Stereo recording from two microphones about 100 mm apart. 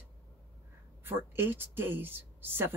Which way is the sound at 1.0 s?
20° right (ahead or behind).